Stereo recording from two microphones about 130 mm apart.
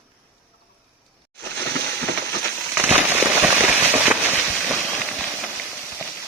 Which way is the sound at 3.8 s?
15° right (ahead or behind).